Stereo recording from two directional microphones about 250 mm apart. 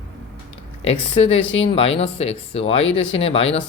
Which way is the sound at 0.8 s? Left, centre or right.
Left.